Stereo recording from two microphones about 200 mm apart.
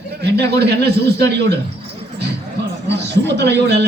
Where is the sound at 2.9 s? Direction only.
60° right (ahead or behind).